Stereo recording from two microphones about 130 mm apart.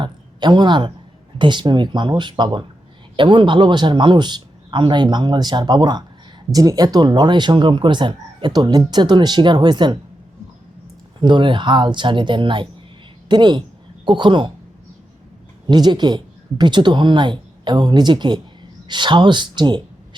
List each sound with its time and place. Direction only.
0.0 s a sound: 35° right (ahead or behind)
1.4 s a man's voice: 35° right (ahead or behind)
11.2 s a man's voice: 40° right (ahead or behind)
15.6 s a man's voice: 35° right (ahead or behind)